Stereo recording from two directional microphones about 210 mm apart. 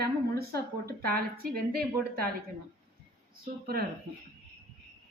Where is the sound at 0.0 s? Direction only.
45° right (ahead or behind).